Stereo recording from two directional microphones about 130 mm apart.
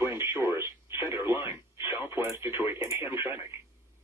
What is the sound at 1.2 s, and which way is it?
Radio, 35° left (ahead or behind).